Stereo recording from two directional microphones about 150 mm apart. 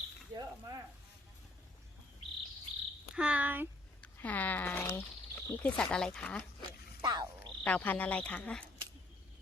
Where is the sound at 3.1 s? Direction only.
10° right (ahead or behind).